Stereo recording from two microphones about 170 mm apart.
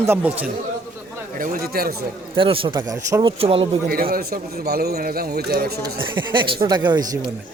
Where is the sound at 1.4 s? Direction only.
55° right (ahead or behind).